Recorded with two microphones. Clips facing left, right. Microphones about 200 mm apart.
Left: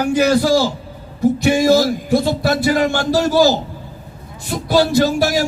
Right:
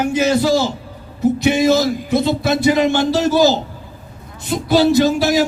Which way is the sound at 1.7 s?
20° right (ahead or behind).